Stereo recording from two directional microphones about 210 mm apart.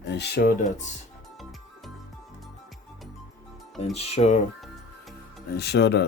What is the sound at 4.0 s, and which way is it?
Speech, 30° left (ahead or behind).